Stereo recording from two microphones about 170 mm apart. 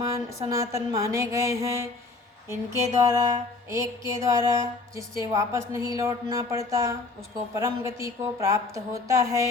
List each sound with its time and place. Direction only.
0.1 s music: 20° right (ahead or behind)
3.0 s music: 20° right (ahead or behind)
7.5 s a woman's voice: 15° right (ahead or behind)